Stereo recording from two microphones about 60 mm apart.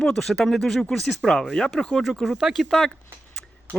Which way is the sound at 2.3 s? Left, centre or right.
Centre.